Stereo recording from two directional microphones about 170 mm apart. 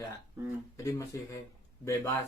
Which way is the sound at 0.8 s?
15° left (ahead or behind).